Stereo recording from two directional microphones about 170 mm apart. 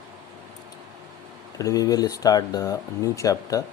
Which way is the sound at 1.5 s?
20° left (ahead or behind).